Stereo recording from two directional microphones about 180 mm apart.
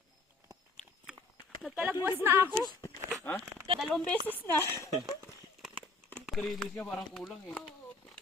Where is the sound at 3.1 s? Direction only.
10° left (ahead or behind).